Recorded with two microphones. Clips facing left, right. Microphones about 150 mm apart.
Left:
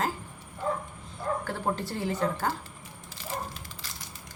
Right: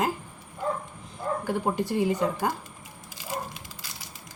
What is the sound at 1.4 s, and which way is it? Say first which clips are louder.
Speech: right 4 dB; 15° right (ahead or behind).